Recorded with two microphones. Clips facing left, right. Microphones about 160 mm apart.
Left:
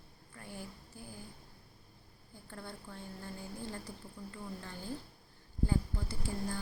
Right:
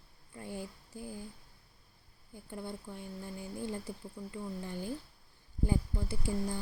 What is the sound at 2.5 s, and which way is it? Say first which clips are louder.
Speech: right 5 dB; 15° right (ahead or behind).